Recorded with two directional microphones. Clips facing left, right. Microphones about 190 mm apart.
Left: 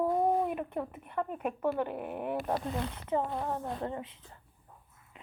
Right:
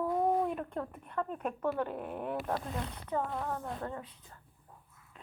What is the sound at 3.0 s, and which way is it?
A woman's voice, 25° left (ahead or behind).